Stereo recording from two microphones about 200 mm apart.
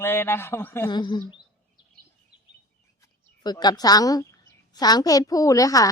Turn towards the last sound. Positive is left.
turn(degrees=15)  # may be behind; listen again after turning